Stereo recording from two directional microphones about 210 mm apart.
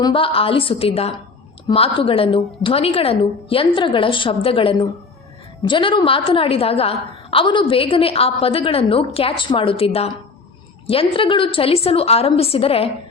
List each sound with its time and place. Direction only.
0.0 s a woman's voice: 25° left (ahead or behind)